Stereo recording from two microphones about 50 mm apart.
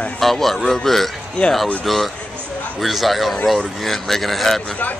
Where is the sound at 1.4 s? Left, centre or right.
Left.